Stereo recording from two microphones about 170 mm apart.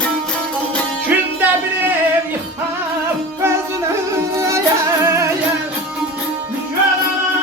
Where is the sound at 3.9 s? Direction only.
15° right (ahead or behind).